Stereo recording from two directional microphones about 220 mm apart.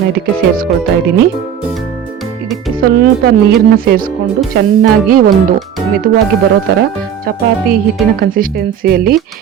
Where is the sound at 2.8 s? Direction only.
40° right (ahead or behind).